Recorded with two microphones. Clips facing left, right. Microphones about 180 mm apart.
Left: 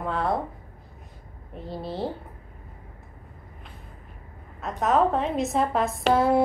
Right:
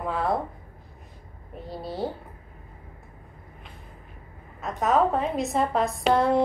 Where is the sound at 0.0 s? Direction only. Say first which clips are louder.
Even; centre (ahead or behind).